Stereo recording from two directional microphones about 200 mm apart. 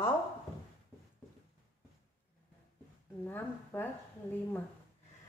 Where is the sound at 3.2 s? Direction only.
10° left (ahead or behind).